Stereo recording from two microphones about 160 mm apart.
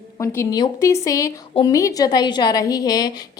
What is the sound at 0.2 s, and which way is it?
A woman's voice, 15° left (ahead or behind).